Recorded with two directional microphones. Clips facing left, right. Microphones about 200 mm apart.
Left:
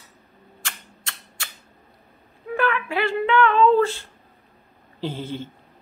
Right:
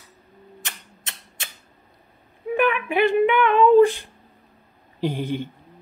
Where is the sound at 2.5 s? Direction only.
20° right (ahead or behind).